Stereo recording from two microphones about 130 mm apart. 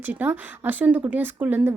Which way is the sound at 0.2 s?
15° right (ahead or behind).